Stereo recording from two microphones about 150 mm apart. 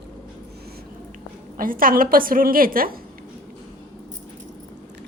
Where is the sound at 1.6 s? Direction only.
70° right (ahead or behind).